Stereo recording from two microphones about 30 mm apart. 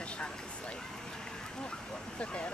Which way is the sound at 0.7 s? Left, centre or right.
Left.